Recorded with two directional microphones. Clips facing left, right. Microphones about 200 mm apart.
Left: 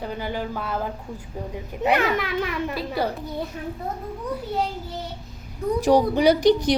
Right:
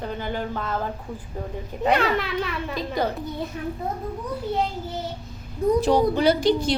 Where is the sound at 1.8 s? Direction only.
10° left (ahead or behind).